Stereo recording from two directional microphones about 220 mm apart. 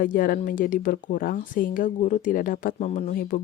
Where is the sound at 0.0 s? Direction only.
40° left (ahead or behind).